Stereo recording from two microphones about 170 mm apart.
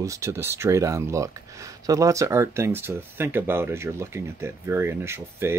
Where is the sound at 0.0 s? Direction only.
15° right (ahead or behind).